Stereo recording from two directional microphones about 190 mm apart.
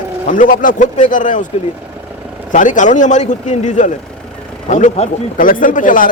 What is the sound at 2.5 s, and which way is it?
Speech, 40° left (ahead or behind).